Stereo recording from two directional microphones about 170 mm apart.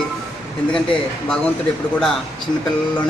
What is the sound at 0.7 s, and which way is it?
Speech, 5° left (ahead or behind).